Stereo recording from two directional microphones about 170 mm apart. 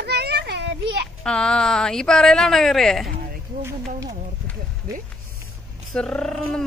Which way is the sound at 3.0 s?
55° right (ahead or behind).